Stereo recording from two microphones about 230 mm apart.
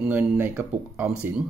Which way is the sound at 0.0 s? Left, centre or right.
Centre.